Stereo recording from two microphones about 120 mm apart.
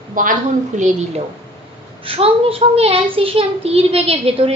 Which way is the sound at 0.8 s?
75° right (ahead or behind).